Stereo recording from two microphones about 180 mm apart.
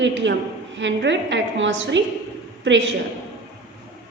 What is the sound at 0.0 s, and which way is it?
A man's voice, 85° right.